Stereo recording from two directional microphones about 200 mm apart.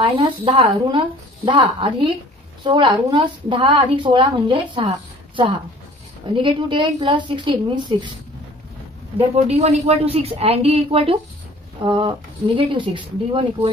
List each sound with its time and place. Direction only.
0.0 s a woman's voice: 25° right (ahead or behind)
9.3 s a woman's voice: 30° right (ahead or behind)